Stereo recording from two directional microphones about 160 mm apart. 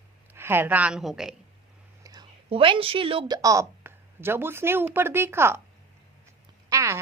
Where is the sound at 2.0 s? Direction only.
20° right (ahead or behind).